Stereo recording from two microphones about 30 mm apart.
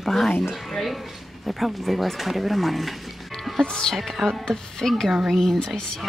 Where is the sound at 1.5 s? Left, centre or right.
Centre.